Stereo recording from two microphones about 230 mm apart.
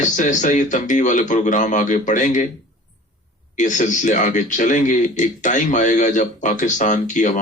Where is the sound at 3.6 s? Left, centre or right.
Left.